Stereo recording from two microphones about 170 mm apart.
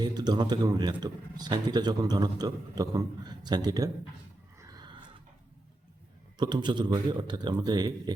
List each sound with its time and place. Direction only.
0.0 s a man's voice: 25° right (ahead or behind)
4.7 s a sound: 25° right (ahead or behind)
6.3 s a man's voice: 25° right (ahead or behind)